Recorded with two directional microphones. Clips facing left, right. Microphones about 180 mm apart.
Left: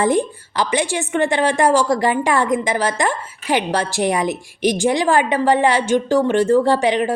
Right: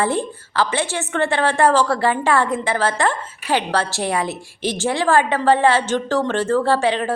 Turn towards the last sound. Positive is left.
turn(degrees=15)  # may be behind; listen again after turning